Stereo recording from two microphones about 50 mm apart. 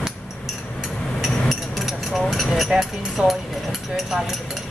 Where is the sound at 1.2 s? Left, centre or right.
Centre.